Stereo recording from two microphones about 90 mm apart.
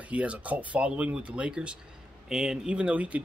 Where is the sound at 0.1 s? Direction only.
15° right (ahead or behind).